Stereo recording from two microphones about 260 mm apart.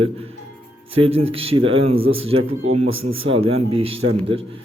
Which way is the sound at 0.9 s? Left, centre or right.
Right.